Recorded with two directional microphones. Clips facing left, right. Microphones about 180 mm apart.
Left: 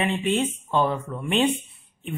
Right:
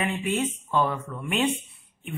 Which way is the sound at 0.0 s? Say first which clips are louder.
Left 3 dB; 25° left (ahead or behind).